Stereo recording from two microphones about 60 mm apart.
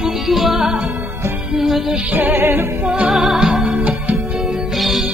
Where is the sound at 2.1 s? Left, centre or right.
Right.